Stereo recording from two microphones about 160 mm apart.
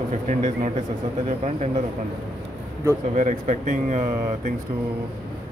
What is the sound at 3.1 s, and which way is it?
Speech, 50° right (ahead or behind).